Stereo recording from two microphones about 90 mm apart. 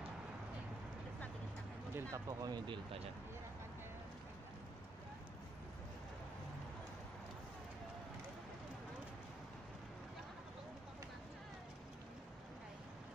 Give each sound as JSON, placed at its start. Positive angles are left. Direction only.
{"t": 2.0, "sound": "speech", "side_deg": -35}